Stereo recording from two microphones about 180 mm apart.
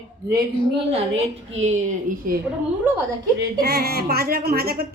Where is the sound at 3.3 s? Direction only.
65° right (ahead or behind).